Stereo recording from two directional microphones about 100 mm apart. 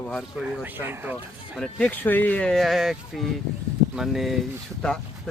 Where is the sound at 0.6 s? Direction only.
20° right (ahead or behind).